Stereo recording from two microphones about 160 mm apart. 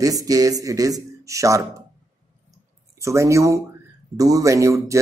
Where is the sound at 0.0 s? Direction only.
20° right (ahead or behind).